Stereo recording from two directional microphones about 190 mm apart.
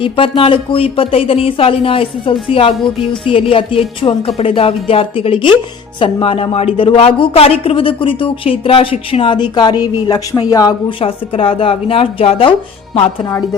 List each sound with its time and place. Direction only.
0.0 s speech: 30° left (ahead or behind)